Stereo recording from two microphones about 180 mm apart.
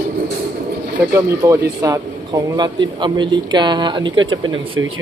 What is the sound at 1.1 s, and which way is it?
Speech, 15° right (ahead or behind).